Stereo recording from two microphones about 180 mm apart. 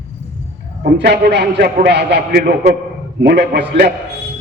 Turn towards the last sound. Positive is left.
turn(degrees=-60)  # may be behind; listen again after turning